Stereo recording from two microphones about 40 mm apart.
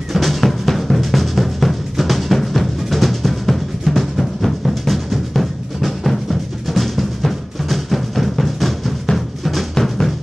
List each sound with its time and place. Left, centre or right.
0.1 s drum: centre
6.7 s music: centre
9.1 s drum: centre
9.8 s music: centre